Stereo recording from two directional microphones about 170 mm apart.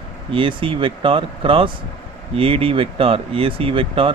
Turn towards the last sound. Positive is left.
turn(degrees=-30)  # may be behind; listen again after turning